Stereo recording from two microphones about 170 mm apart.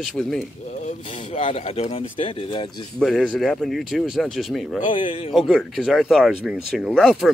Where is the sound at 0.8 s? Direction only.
40° left (ahead or behind).